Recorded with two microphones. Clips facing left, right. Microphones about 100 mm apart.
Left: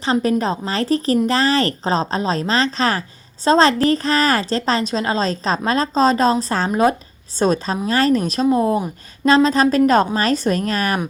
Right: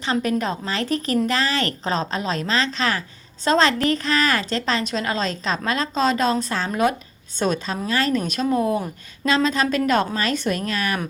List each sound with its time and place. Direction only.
0.0 s a woman's voice: 35° left (ahead or behind)
8.5 s a woman's voice: 30° left (ahead or behind)